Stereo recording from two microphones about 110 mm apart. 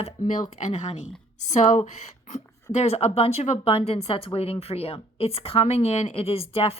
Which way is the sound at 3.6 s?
65° left (ahead or behind).